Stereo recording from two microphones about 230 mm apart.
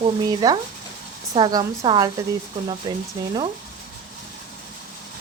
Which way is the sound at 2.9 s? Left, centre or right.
Centre.